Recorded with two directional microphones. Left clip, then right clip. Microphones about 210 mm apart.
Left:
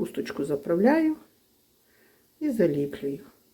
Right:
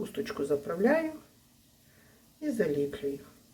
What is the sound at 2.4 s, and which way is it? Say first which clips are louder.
Speech: left 5 dB; 35° left (ahead or behind).